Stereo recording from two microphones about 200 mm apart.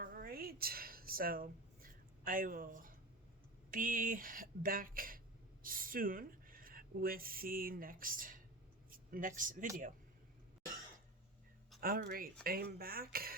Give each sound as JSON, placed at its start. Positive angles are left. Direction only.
{"t": 0.0, "sound": "a sound", "side_deg": -45}
{"t": 3.7, "sound": "speech", "side_deg": -45}
{"t": 11.8, "sound": "speech", "side_deg": -50}